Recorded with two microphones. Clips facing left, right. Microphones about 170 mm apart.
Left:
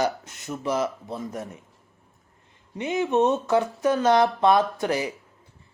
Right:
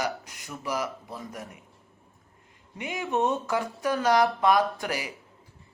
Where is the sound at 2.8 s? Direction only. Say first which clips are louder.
Left 6 dB; 20° left (ahead or behind).